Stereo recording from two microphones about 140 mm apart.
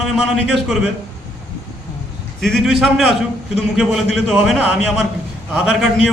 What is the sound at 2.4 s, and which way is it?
A man's voice, centre (ahead or behind).